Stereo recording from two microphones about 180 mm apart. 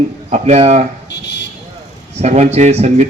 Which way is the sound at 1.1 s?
75° left (ahead or behind).